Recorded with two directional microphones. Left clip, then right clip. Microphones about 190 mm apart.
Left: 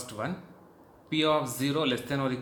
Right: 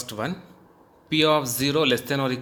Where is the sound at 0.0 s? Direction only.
50° right (ahead or behind).